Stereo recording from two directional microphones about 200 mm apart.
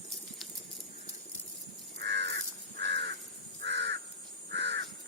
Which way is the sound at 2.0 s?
60° right (ahead or behind).